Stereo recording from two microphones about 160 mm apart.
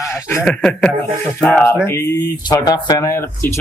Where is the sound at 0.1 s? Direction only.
15° left (ahead or behind).